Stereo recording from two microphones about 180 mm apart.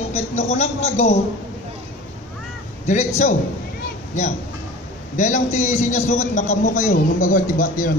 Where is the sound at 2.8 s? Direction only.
45° left (ahead or behind).